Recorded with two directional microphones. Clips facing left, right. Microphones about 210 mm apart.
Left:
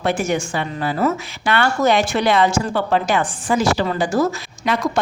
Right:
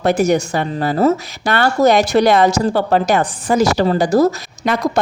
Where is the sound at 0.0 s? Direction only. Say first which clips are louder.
Right 6 dB; 40° right (ahead or behind).